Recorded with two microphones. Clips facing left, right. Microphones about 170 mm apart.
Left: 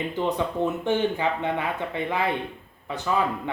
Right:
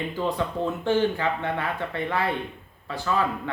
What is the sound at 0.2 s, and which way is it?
A man's voice, 20° left (ahead or behind).